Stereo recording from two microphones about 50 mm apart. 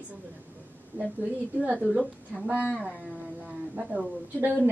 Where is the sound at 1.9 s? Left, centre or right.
Centre.